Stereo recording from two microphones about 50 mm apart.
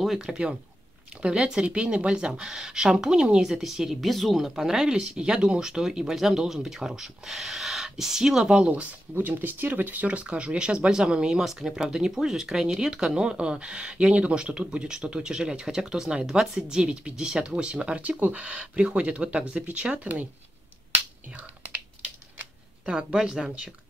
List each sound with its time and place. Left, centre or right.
0.2 s speech: centre
4.6 s speech: centre
9.1 s speech: right
21.3 s whispering: right
22.8 s speech: right